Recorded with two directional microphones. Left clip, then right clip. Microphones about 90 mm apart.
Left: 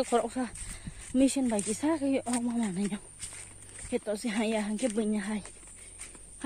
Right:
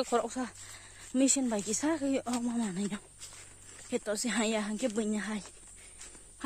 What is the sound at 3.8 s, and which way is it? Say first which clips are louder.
Speech: left 1 dB; 45° right (ahead or behind).